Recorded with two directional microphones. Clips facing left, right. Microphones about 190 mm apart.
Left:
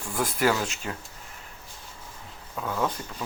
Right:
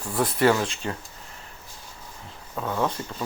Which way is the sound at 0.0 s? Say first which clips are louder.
Right 4 dB; centre (ahead or behind).